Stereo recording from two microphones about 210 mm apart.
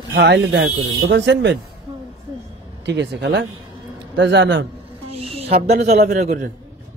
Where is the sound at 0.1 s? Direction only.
60° right (ahead or behind).